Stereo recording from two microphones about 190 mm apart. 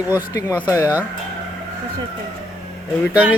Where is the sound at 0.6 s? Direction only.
15° left (ahead or behind).